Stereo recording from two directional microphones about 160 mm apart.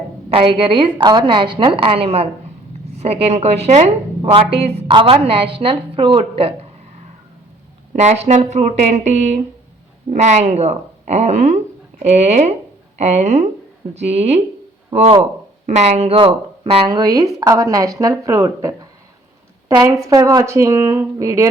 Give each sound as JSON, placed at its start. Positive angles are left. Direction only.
{"t": 0.3, "sound": "a woman's voice", "side_deg": -35}
{"t": 7.9, "sound": "a woman's voice", "side_deg": -45}
{"t": 15.6, "sound": "a woman's voice", "side_deg": -45}
{"t": 16.9, "sound": "speech", "side_deg": -25}